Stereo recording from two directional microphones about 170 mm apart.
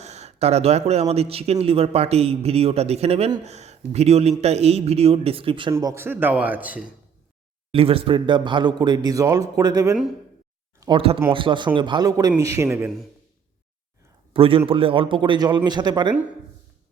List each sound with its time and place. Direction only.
0.0 s a man's voice: 40° right (ahead or behind)
5.7 s a man's voice: 15° right (ahead or behind)
7.7 s a man's voice: 35° right (ahead or behind); by 12.9 s 15° right (ahead or behind)
14.3 s a man's voice: 30° right (ahead or behind)